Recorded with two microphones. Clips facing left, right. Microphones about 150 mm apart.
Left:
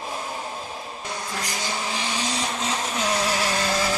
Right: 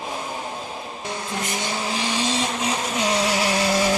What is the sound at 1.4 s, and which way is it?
Vehicle, 25° right (ahead or behind).